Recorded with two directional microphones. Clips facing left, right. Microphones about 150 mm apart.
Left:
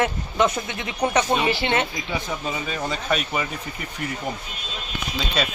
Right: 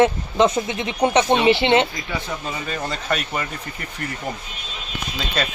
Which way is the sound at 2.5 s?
Centre (ahead or behind).